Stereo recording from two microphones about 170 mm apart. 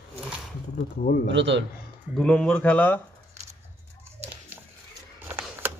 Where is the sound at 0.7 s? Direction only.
60° left (ahead or behind).